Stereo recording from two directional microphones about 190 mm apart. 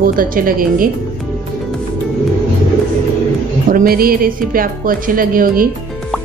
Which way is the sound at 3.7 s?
50° right (ahead or behind).